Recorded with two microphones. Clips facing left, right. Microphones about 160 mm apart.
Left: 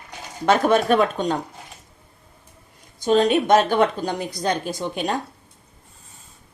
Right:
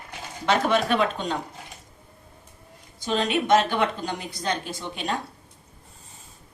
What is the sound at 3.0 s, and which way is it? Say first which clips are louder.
A woman's voice: left 7 dB; 45° left (ahead or behind).